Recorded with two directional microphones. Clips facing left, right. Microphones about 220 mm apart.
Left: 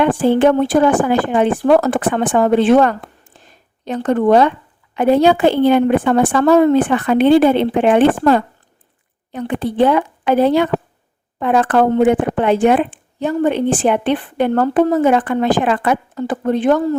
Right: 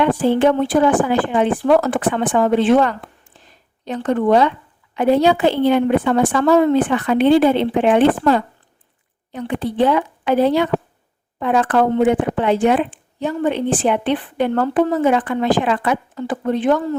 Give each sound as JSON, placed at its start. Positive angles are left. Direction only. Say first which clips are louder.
{"t": 0.0, "sound": "speech", "louder": "left 2 dB", "side_deg": 50}
{"t": 3.3, "sound": "a sound", "louder": "left 2 dB", "side_deg": 45}
{"t": 3.8, "sound": "speech", "louder": "left 3 dB", "side_deg": 45}